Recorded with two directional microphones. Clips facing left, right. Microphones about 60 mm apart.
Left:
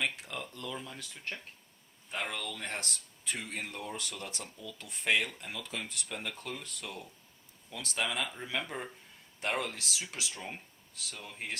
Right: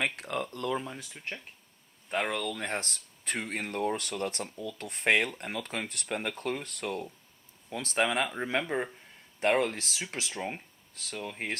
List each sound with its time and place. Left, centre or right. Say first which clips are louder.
0.0 s speech: right 4 dB; right
0.9 s speech: right 2 dB; centre
2.0 s speech: right 7 dB; right
2.5 s speech: right 5 dB; right
3.2 s speech: right 5 dB; right
7.7 s speech: right 7 dB; right